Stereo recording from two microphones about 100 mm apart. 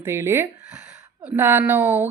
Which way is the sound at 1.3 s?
25° right (ahead or behind).